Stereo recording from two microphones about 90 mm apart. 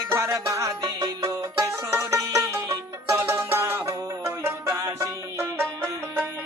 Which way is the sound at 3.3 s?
25° right (ahead or behind).